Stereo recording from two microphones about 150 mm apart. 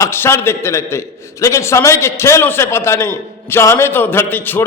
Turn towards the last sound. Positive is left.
turn(degrees=15)  # may be behind; listen again after turning